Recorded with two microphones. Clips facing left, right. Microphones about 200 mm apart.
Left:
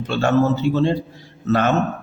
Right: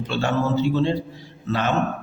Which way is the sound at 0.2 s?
45° left (ahead or behind).